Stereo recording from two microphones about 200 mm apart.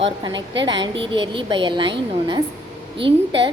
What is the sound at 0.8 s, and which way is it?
A woman's voice, 25° right (ahead or behind).